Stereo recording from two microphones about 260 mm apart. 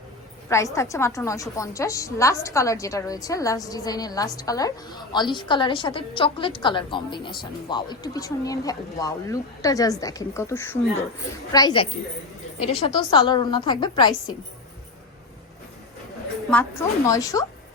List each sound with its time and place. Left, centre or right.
0.4 s a woman's voice: centre
16.5 s a woman's voice: centre